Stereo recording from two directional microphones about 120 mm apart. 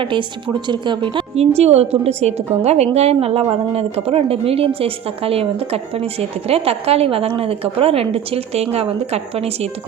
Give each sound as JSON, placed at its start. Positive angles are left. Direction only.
{"t": 0.0, "sound": "a woman's voice", "side_deg": -45}
{"t": 1.4, "sound": "a woman's voice", "side_deg": -60}